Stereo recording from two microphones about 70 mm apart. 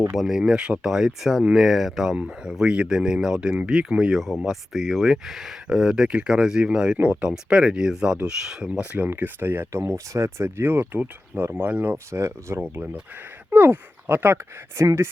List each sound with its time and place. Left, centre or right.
0.2 s speech: centre
7.0 s speech: right
7.3 s speech: centre
9.0 s speech: right
12.7 s speech: right
14.8 s speech: right